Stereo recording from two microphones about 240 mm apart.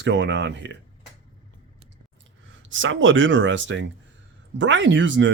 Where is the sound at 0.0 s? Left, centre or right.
Right.